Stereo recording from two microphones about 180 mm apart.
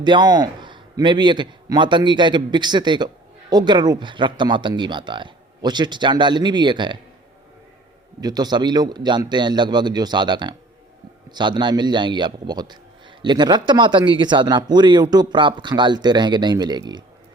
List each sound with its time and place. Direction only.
0.0 s speech: 25° right (ahead or behind)
8.2 s speech: 20° right (ahead or behind)